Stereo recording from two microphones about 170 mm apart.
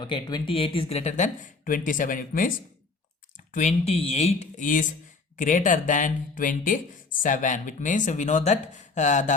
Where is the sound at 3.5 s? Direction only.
45° left (ahead or behind).